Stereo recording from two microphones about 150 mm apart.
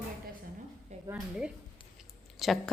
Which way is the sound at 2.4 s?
Centre (ahead or behind).